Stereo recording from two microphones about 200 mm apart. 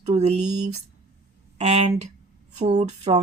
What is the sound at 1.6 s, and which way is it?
Speech, 35° right (ahead or behind).